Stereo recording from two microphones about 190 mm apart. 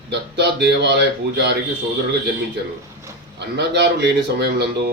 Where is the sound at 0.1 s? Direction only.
60° right (ahead or behind).